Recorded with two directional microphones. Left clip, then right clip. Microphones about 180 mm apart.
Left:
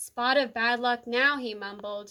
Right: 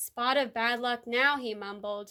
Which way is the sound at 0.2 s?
30° right (ahead or behind).